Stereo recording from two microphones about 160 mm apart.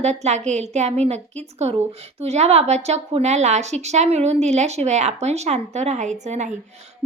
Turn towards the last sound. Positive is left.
turn(degrees=-45)  # may be behind; listen again after turning